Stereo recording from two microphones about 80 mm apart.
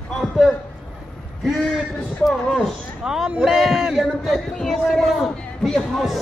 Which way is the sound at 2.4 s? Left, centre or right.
Centre.